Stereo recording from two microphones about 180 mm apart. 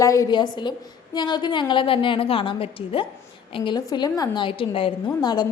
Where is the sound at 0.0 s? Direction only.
20° left (ahead or behind).